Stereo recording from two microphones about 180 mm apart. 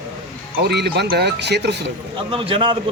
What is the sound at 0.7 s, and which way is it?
Speech, 70° right (ahead or behind).